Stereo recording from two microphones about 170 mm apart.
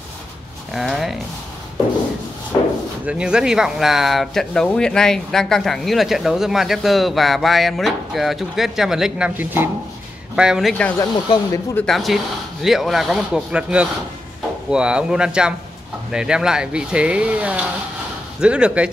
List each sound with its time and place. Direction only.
0.7 s speech: centre (ahead or behind)
3.1 s speech: 5° right (ahead or behind)
11.0 s speech: 20° left (ahead or behind)
11.8 s speech: centre (ahead or behind)